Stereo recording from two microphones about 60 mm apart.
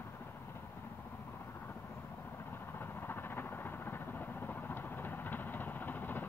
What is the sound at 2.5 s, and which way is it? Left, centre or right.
Vehicle, left.